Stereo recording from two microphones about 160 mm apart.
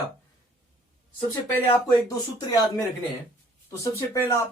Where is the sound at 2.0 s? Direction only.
25° left (ahead or behind).